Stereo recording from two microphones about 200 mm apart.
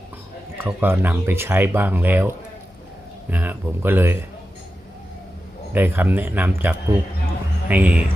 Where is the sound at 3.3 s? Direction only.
10° right (ahead or behind).